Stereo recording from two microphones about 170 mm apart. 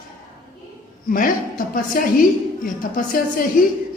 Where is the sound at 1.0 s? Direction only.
55° left (ahead or behind).